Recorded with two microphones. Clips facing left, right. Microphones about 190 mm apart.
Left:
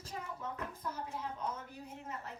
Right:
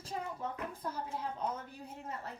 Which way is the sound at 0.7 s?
30° right (ahead or behind).